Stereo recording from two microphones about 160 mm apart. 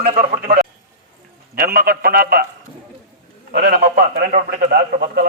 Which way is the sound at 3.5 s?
75° right (ahead or behind).